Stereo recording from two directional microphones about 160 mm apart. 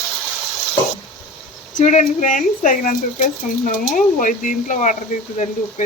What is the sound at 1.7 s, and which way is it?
Speech, 50° left (ahead or behind).